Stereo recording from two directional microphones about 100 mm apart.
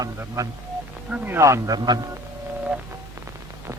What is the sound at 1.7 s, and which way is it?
Speech, 45° right (ahead or behind).